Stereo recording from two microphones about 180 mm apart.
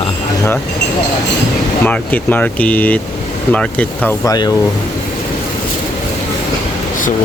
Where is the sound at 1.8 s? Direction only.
10° left (ahead or behind).